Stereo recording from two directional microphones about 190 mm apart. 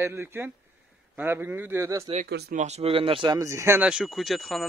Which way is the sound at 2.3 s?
60° right (ahead or behind).